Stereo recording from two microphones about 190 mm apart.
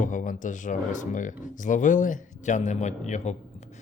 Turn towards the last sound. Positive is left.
turn(degrees=35)  # may be behind; listen again after turning